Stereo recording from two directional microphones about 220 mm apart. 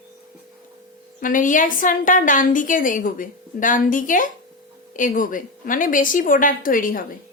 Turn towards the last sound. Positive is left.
turn(degrees=40)  # may be behind; listen again after turning